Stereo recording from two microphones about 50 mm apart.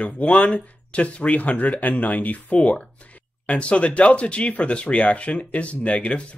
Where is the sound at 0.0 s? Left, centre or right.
Left.